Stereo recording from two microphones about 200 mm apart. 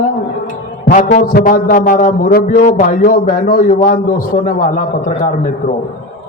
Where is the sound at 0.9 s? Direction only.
40° left (ahead or behind).